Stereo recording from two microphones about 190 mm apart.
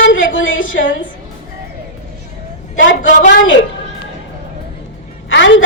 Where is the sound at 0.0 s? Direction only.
85° left.